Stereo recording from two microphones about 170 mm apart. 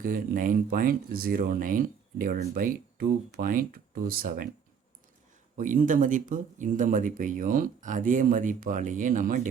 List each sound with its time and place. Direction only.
0.0 s speech: 55° right (ahead or behind)
5.5 s speech: 50° right (ahead or behind)